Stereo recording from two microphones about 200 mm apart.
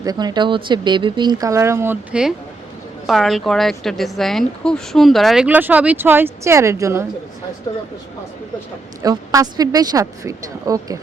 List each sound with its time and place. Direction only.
0.0 s a woman's voice: 20° right (ahead or behind)
9.0 s a woman's voice: 20° right (ahead or behind)